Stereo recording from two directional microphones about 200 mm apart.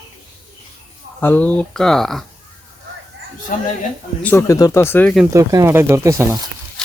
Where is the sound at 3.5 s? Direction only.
40° left (ahead or behind).